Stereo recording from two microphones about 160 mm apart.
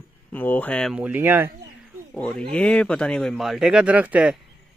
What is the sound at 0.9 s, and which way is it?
Speech, 10° right (ahead or behind).